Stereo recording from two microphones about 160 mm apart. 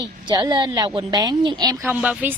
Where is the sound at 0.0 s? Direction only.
25° right (ahead or behind).